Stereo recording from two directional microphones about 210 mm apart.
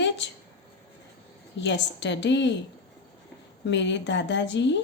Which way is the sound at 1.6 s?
55° left (ahead or behind).